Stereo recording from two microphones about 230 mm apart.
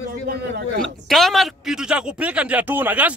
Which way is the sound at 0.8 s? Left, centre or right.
Centre.